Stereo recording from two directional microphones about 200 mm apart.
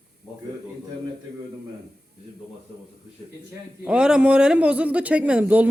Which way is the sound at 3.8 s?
5° right (ahead or behind).